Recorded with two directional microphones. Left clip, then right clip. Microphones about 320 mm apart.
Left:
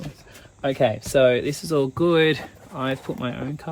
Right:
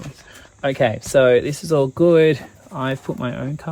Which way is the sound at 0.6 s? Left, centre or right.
Right.